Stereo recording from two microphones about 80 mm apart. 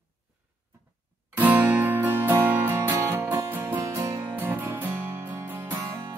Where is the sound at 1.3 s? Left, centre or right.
Right.